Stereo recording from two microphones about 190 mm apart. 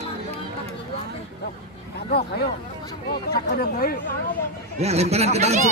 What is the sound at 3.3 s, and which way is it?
Speech, 50° left (ahead or behind).